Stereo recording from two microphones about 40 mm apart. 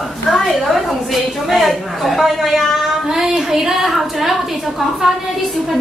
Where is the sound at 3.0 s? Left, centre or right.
Centre.